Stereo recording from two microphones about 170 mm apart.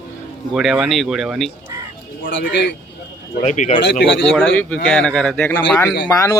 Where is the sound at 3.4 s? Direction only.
45° left (ahead or behind).